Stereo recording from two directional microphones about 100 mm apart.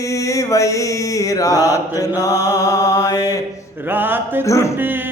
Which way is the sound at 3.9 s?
20° right (ahead or behind).